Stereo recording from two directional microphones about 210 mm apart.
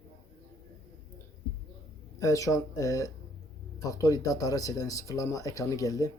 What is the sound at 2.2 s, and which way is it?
Speech, 15° left (ahead or behind).